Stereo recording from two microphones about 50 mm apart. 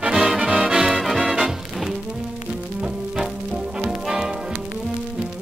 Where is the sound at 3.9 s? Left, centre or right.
Centre.